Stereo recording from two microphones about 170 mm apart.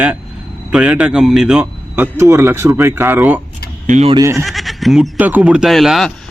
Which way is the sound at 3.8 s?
50° right (ahead or behind).